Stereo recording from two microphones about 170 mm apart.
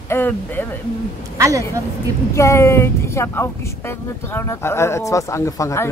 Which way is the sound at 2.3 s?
15° left (ahead or behind).